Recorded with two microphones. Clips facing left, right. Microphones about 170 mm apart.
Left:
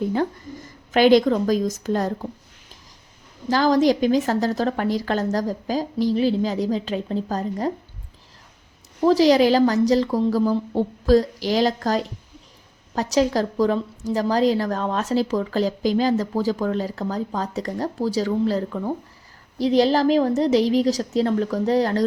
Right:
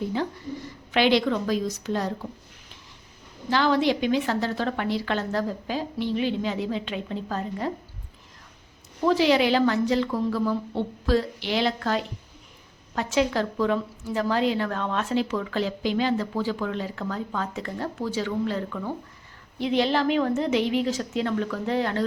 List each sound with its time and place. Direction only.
0.1 s a woman's voice: 45° left (ahead or behind)
3.5 s a woman's voice: 40° left (ahead or behind)
9.0 s a woman's voice: 35° left (ahead or behind)